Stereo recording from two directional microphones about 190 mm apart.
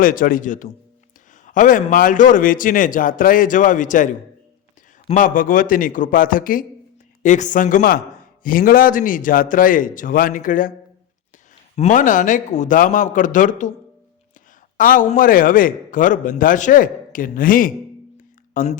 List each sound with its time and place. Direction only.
0.0 s a man's voice: 45° left (ahead or behind)
5.1 s a man's voice: 45° left (ahead or behind)
11.8 s a man's voice: 45° left (ahead or behind)
14.8 s a man's voice: 45° left (ahead or behind)